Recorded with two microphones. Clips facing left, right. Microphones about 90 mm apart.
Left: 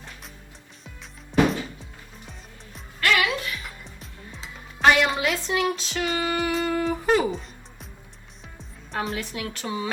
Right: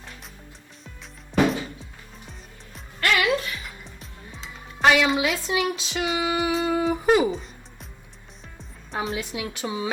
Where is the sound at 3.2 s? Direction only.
35° right (ahead or behind).